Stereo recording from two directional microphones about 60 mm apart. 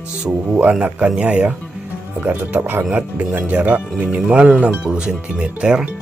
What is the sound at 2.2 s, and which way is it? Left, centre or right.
Speech, right.